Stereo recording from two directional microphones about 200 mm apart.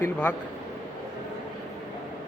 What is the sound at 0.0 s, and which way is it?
Speech, 10° left (ahead or behind).